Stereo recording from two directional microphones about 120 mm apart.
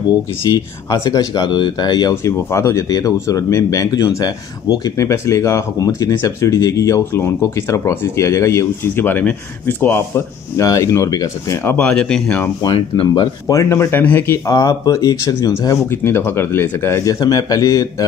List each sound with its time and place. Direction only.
0.5 s speech: 30° left (ahead or behind); by 12.4 s 10° left (ahead or behind)
12.7 s speech: 45° left (ahead or behind); by 18.0 s 30° left (ahead or behind)